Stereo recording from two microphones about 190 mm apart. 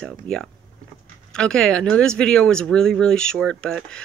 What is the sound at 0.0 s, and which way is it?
Speech, centre (ahead or behind).